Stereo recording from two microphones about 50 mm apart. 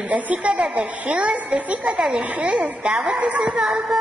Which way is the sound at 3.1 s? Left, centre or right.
Right.